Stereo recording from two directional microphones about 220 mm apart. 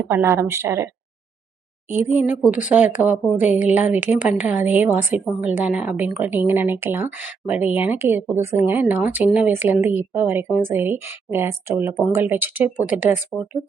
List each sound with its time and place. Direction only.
0.1 s a woman's voice: 10° right (ahead or behind)
2.0 s a woman's voice: 10° right (ahead or behind)